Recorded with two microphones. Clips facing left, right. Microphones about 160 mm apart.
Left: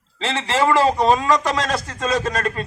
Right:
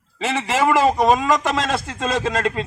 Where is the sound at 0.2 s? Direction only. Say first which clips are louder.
Even; 15° right (ahead or behind).